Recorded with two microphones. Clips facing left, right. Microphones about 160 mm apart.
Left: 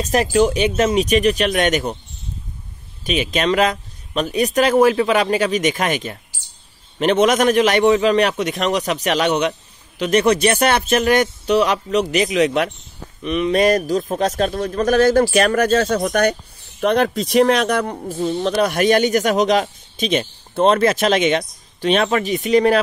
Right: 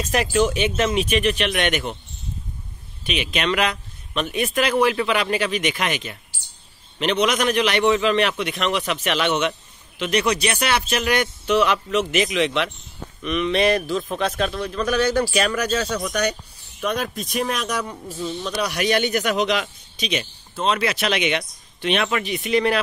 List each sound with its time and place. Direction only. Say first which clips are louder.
0.0 s a man's voice: left 4 dB; 40° left (ahead or behind)
3.0 s a man's voice: left 5 dB; 40° left (ahead or behind)
16.8 s speech: left 8 dB; 65° left (ahead or behind); by 22.8 s 40° left (ahead or behind)